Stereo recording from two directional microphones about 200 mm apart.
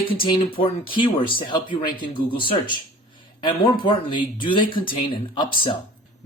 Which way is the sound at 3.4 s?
25° left (ahead or behind).